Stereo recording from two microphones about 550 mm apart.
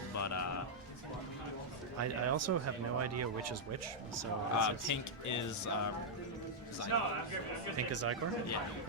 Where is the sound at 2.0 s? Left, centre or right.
Right.